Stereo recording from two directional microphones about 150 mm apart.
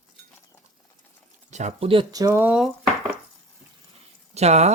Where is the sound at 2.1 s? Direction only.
20° right (ahead or behind).